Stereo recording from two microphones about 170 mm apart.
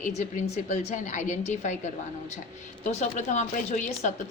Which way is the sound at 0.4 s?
40° left (ahead or behind).